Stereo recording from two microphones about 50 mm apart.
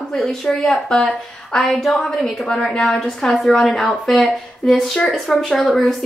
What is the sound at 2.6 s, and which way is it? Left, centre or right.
Speech, left.